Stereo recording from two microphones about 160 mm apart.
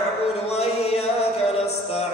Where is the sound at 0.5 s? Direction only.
40° left (ahead or behind).